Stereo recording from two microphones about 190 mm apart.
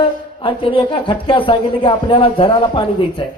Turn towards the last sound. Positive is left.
turn(degrees=25)  # may be behind; listen again after turning